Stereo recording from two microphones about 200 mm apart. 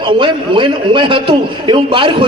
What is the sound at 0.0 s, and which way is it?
A man's voice, 25° right (ahead or behind).